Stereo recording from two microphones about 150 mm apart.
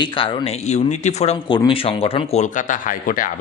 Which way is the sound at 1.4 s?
30° left (ahead or behind).